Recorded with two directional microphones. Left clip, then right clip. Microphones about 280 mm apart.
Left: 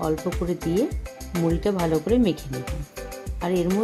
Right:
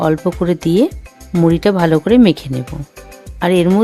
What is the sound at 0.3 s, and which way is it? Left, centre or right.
Speech, right.